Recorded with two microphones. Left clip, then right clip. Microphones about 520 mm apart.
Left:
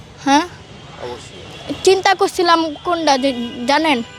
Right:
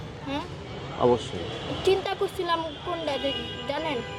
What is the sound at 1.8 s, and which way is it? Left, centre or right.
A woman's voice, left.